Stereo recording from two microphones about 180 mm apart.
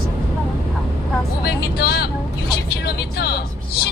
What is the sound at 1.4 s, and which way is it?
Vehicle, 60° left (ahead or behind).